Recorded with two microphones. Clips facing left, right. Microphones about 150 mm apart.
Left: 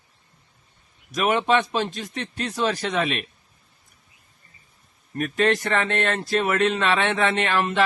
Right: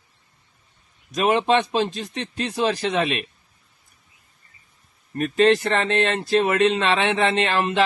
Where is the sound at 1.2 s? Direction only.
30° right (ahead or behind).